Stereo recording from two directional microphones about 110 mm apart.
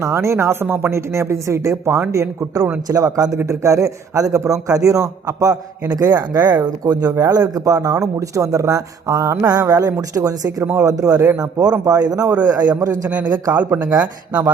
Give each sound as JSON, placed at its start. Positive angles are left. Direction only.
{"t": 0.0, "sound": "a man's voice", "side_deg": -25}